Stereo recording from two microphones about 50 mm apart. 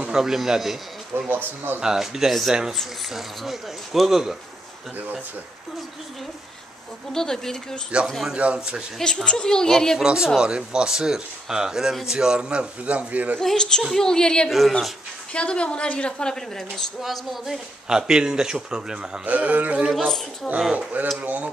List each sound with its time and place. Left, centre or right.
0.2 s speech: centre
1.3 s speech: right
1.8 s speech: centre
7.1 s a child's voice: centre
8.4 s speech: right
9.0 s a child's voice: centre
9.9 s speech: centre; by 13.4 s right
13.4 s a child's voice: centre
17.0 s speech: centre
17.8 s speech: centre
19.2 s speech: right
20.0 s a child's voice: centre
20.7 s speech: right